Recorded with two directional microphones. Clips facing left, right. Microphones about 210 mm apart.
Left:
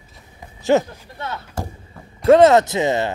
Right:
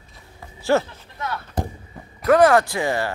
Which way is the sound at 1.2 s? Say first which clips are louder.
Even; 35° left (ahead or behind).